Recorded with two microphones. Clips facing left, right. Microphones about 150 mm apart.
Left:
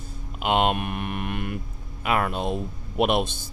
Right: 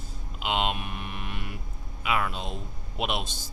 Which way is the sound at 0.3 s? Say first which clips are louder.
Left 6 dB; 50° left (ahead or behind).